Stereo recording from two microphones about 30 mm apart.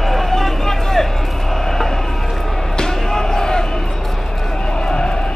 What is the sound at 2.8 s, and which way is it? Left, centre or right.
Basketball bounce, centre.